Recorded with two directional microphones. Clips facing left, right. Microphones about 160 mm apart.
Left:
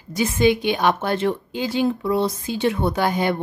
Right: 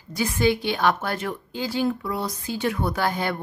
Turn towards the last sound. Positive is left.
turn(degrees=20)  # may be behind; listen again after turning